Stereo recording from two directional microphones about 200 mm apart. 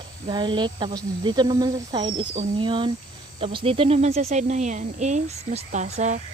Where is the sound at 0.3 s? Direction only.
25° right (ahead or behind).